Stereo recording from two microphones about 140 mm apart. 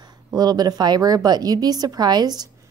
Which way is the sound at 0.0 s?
30° right (ahead or behind).